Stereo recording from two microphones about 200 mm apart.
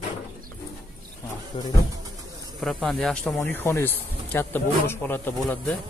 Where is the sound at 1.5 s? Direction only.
20° left (ahead or behind).